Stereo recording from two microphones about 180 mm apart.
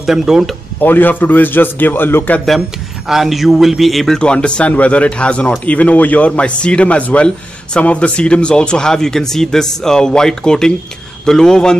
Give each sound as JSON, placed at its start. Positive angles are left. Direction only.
{"t": 0.0, "sound": "a man's voice", "side_deg": 0}
{"t": 0.7, "sound": "a man's voice", "side_deg": 10}